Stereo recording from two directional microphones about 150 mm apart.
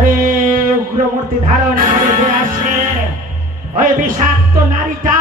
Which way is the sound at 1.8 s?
60° right (ahead or behind).